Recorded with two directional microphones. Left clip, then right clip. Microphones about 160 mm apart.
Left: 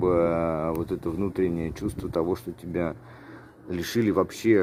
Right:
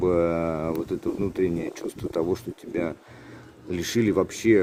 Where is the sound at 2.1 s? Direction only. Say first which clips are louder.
Right 1 dB; 5° left (ahead or behind).